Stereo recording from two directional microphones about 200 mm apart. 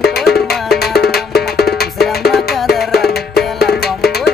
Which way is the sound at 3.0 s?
50° left (ahead or behind).